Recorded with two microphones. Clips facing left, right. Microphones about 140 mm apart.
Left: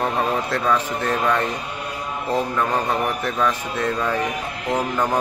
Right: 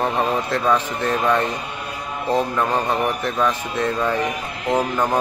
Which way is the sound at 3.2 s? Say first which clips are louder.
Right 1 dB; 15° right (ahead or behind).